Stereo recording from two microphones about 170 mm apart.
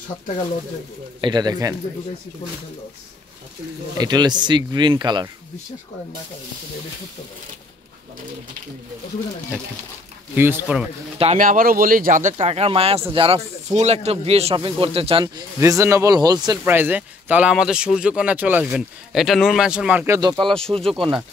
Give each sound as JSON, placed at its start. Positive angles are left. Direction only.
{"t": 1.2, "sound": "speech", "side_deg": -25}
{"t": 4.0, "sound": "speech", "side_deg": -25}
{"t": 10.3, "sound": "speech", "side_deg": -10}
{"t": 11.3, "sound": "speech", "side_deg": -55}
{"t": 15.2, "sound": "speech", "side_deg": -20}
{"t": 16.6, "sound": "speech", "side_deg": -10}
{"t": 20.2, "sound": "speech", "side_deg": -25}
{"t": 20.5, "sound": "speech", "side_deg": 5}